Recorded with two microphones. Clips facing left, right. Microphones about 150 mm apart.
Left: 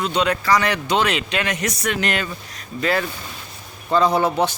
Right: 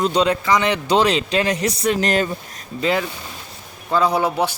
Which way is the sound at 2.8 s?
20° right (ahead or behind).